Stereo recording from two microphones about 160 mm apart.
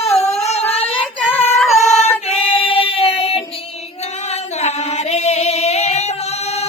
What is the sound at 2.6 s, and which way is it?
Child singing, 35° left (ahead or behind).